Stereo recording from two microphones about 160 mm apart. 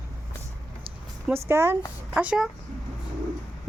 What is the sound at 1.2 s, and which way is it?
Speech, 15° right (ahead or behind).